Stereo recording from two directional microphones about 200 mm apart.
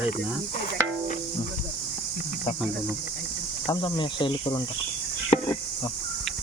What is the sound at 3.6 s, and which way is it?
Speech, 20° left (ahead or behind).